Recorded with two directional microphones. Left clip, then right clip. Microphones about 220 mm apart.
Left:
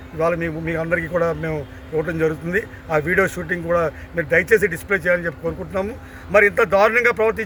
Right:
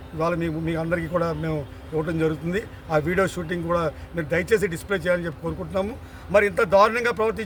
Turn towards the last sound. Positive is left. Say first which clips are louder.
# left 6 dB
turn(degrees=-5)  # may be behind; listen again after turning